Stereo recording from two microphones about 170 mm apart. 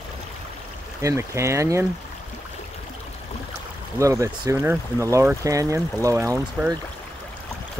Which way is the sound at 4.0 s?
20° right (ahead or behind).